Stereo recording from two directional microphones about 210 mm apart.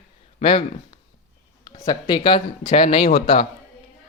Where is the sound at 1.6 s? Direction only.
15° left (ahead or behind).